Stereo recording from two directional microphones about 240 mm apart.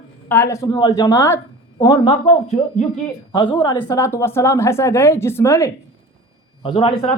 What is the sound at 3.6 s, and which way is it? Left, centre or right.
A woman's voice, centre.